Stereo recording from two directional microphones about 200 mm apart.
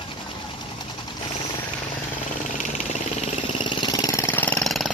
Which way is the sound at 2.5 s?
30° left (ahead or behind).